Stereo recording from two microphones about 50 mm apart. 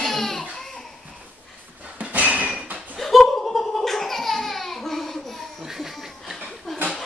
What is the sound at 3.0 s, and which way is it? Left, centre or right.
Laughter, centre.